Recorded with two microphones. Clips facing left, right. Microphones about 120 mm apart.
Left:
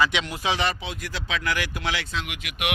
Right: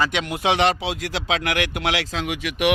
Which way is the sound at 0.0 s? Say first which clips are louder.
Right 2 dB; 45° right (ahead or behind).